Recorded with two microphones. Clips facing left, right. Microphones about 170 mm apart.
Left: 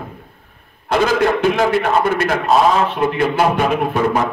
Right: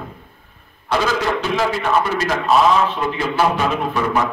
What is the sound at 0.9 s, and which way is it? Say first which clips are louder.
A man's voice: left 4 dB; 55° left (ahead or behind).